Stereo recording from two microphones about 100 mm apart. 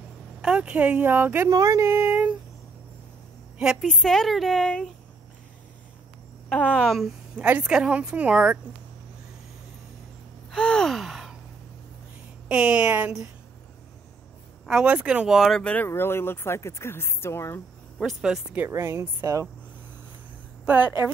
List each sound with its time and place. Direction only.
0.4 s a woman's voice: 10° right (ahead or behind)
1.5 s a woman's voice: 30° right (ahead or behind)
2.0 s a woman's voice: 15° right (ahead or behind)
3.8 s speech: 5° left (ahead or behind)
6.5 s a woman's voice: 10° left (ahead or behind); by 8.5 s 10° right (ahead or behind)
10.5 s gasp: 5° left (ahead or behind)
12.4 s a woman's voice: 10° right (ahead or behind)
14.7 s a woman's voice: 5° right (ahead or behind)
15.6 s speech: 15° left (ahead or behind)
15.9 s speech: 25° left (ahead or behind)
17.9 s speech: 5° right (ahead or behind)
18.7 s a woman's voice: 25° right (ahead or behind)
20.6 s a woman's voice: 15° right (ahead or behind)